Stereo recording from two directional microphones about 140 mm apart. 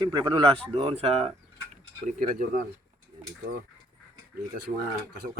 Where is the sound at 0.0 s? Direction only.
30° right (ahead or behind).